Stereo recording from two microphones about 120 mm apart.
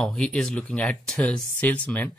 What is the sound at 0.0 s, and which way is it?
Speech, 10° left (ahead or behind).